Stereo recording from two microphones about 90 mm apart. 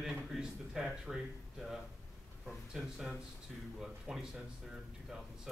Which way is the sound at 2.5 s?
5° right (ahead or behind).